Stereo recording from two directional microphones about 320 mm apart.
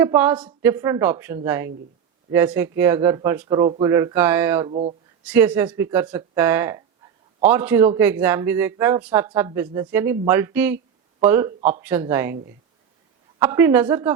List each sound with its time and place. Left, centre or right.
0.0 s speech: centre
4.7 s speech: centre
5.2 s speech: centre
13.4 s speech: centre